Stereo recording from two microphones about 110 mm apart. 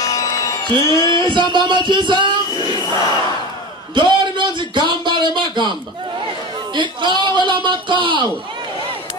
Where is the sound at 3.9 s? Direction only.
45° right (ahead or behind).